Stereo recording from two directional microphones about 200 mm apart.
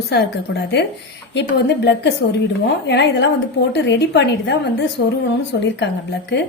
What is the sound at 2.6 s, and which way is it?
A woman's voice, 60° left (ahead or behind).